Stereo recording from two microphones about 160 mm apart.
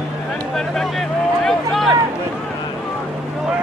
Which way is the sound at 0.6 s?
Centre (ahead or behind).